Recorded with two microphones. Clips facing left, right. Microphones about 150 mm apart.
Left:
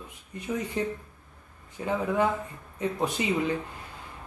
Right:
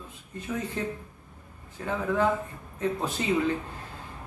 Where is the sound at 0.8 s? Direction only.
15° left (ahead or behind).